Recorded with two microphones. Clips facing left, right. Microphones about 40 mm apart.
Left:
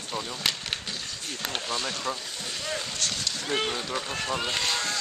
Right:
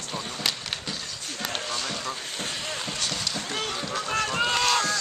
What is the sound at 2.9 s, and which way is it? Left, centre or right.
Speech, centre.